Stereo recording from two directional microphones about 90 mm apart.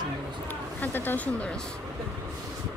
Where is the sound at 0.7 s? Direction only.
20° left (ahead or behind).